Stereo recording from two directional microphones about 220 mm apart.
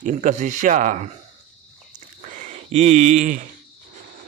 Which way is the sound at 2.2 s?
35° right (ahead or behind).